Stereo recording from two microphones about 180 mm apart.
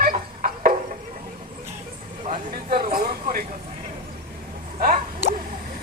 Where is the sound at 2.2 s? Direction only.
45° right (ahead or behind).